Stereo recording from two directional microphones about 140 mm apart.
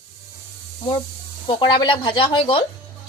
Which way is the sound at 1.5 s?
35° left (ahead or behind).